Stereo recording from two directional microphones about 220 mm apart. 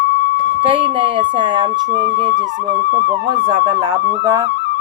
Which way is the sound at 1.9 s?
35° right (ahead or behind).